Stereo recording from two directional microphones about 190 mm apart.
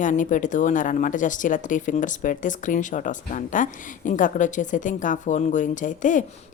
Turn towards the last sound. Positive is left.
turn(degrees=40)  # may be behind; listen again after turning